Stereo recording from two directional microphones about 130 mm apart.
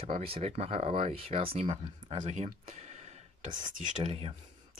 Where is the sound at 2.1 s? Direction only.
60° right (ahead or behind).